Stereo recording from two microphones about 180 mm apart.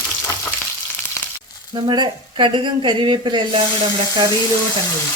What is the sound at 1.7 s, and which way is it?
Speech, 25° right (ahead or behind).